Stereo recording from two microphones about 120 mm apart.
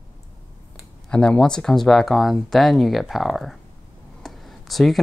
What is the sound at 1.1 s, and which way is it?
Speech, 5° left (ahead or behind).